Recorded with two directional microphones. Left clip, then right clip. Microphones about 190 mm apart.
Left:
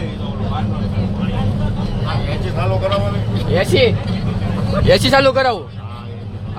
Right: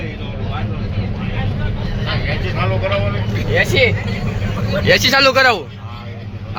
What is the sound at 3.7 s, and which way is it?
Speech, 40° left (ahead or behind).